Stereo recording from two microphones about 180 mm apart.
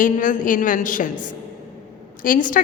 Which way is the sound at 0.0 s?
45° left (ahead or behind).